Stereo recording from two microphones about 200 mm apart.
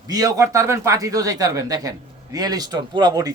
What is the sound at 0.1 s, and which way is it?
A man's voice, 20° right (ahead or behind).